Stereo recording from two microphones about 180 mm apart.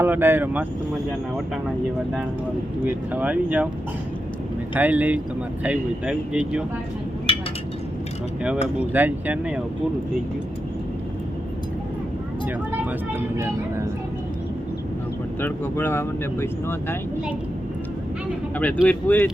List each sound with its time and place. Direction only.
0.0 s speech: 10° right (ahead or behind)
2.8 s speech: 10° right (ahead or behind)
4.7 s speech: 10° right (ahead or behind)
8.6 s speech: 10° right (ahead or behind)
13.1 s speech: 15° right (ahead or behind)
15.4 s speech: 10° left (ahead or behind)
18.9 s speech: 10° left (ahead or behind)